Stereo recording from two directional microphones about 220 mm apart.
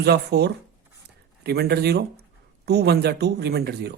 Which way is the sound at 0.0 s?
50° right (ahead or behind).